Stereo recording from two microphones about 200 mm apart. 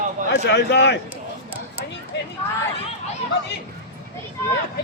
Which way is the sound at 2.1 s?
60° left (ahead or behind).